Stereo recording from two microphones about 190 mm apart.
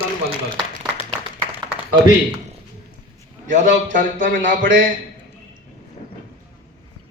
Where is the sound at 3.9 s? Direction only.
45° right (ahead or behind).